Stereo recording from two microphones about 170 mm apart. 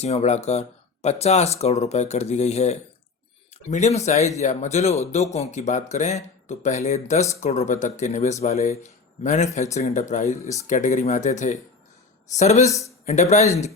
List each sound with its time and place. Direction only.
0.0 s speech: 40° left (ahead or behind)